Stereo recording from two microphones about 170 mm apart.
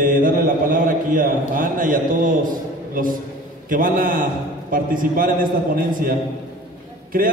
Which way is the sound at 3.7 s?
55° right (ahead or behind).